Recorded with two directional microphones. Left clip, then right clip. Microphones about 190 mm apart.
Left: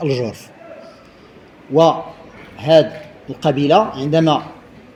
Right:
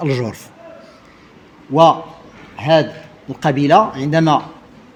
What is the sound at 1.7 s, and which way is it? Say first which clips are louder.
Speech: right 2 dB; 40° right (ahead or behind).